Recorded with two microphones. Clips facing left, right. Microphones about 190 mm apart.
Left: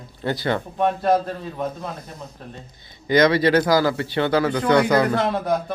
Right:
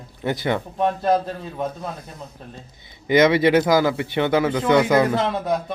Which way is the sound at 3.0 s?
20° right (ahead or behind).